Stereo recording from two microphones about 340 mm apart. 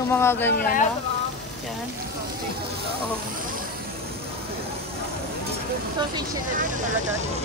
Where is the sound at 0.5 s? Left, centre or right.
Left.